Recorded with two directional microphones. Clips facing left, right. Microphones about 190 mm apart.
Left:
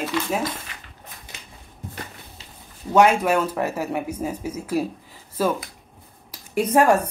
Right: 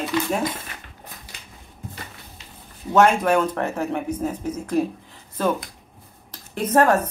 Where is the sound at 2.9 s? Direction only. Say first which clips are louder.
Even; 10° left (ahead or behind).